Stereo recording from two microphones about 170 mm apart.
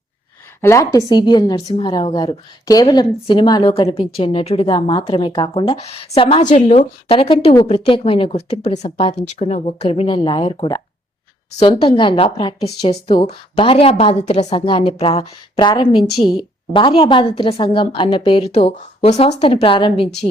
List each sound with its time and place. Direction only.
0.6 s a woman's voice: 15° left (ahead or behind); by 20.1 s 30° left (ahead or behind)